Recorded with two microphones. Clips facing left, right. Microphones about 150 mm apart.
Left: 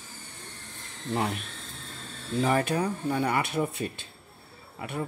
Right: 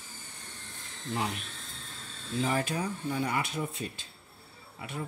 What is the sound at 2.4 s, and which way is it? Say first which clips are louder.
Speech: left 5 dB; 60° left (ahead or behind).